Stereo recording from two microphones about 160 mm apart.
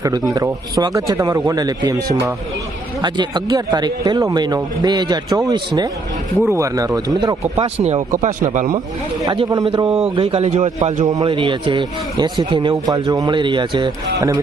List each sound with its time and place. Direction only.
0.3 s a man's voice: 20° right (ahead or behind)
2.0 s speech: 75° right (ahead or behind)
3.0 s a man's voice: 25° right (ahead or behind)
8.4 s speech: 50° right (ahead or behind)
9.2 s a man's voice: 30° right (ahead or behind); by 11.1 s 45° right (ahead or behind)
11.1 s a man's voice: 30° right (ahead or behind)